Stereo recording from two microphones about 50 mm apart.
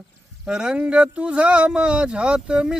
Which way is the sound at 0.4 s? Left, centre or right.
Centre.